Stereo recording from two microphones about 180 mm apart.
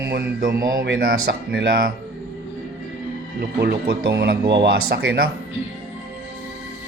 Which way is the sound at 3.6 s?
60° right (ahead or behind).